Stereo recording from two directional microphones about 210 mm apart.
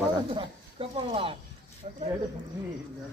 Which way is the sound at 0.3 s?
25° right (ahead or behind).